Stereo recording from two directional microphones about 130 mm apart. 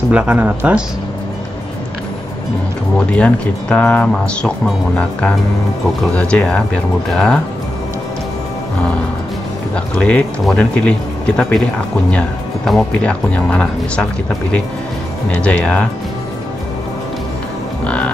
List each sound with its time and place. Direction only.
0.1 s speech: 10° right (ahead or behind)
3.1 s speech: 10° left (ahead or behind)
6.1 s speech: 10° left (ahead or behind)
9.9 s speech: 10° left (ahead or behind)
15.2 s speech: 10° left (ahead or behind)
17.8 s music: 10° left (ahead or behind)